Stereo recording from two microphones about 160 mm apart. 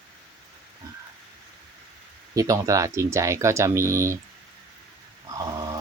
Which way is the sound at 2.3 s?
20° right (ahead or behind).